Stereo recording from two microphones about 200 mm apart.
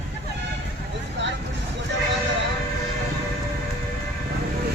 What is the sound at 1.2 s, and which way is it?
Vehicle, 60° right (ahead or behind).